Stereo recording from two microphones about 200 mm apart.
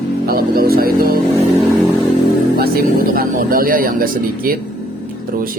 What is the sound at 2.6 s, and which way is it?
Speech, 45° right (ahead or behind).